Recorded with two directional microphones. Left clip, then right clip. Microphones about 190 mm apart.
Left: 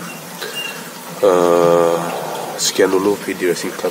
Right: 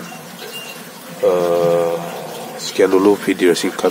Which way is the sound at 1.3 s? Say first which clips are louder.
Left 3 dB; 15° left (ahead or behind).